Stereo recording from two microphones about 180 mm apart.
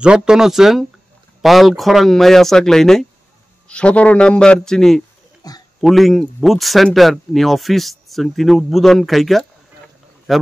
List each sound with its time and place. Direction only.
0.0 s speech: 5° right (ahead or behind)
5.4 s a sound: 20° left (ahead or behind)
5.8 s speech: centre (ahead or behind)